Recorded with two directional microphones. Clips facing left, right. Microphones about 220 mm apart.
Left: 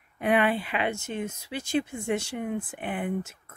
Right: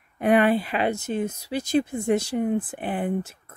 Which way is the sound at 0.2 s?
40° right (ahead or behind).